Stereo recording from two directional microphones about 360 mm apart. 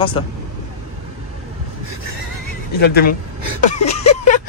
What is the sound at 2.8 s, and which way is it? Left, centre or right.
Speech, left.